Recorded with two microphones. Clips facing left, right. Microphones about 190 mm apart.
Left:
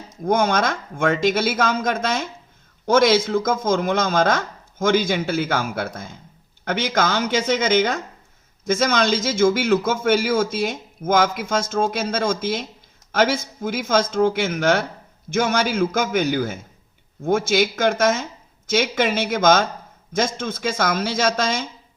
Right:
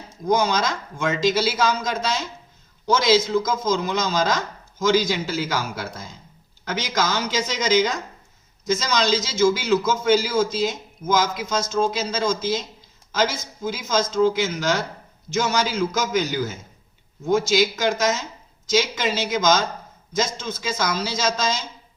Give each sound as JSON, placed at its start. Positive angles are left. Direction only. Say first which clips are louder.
{"t": 0.1, "sound": "a man's voice", "louder": "left 1 dB", "side_deg": 55}